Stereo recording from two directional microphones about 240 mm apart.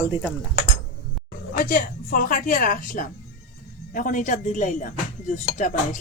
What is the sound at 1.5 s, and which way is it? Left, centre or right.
Speech, left.